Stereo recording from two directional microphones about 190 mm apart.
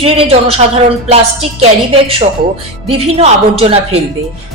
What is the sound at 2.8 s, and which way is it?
Speech, 30° right (ahead or behind).